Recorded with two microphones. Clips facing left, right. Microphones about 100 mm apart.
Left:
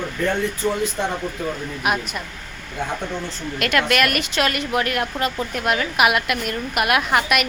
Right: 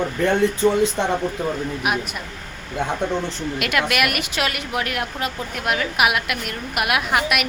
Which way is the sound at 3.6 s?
10° right (ahead or behind).